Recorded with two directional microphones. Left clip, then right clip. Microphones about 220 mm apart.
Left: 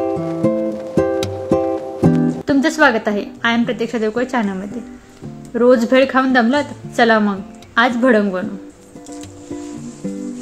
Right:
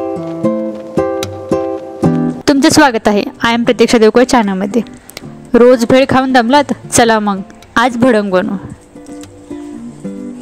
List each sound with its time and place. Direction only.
0.0 s music: centre (ahead or behind)
2.4 s speech: 45° right (ahead or behind)